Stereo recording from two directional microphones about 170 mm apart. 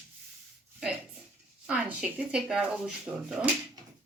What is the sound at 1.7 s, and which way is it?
Speech, 5° right (ahead or behind).